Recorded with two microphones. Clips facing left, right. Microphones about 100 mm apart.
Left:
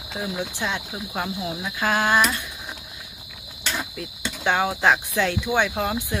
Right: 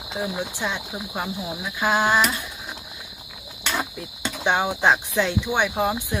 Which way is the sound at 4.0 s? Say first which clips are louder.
Right 1 dB; 15° right (ahead or behind).